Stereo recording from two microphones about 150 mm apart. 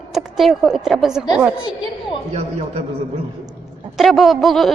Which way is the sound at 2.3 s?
45° right (ahead or behind).